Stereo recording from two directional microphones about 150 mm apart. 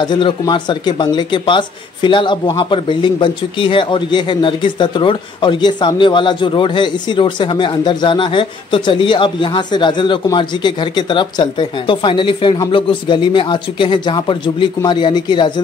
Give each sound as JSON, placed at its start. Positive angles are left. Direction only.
{"t": 0.0, "sound": "speech", "side_deg": 30}